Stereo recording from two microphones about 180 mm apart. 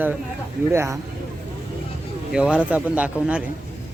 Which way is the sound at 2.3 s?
5° right (ahead or behind).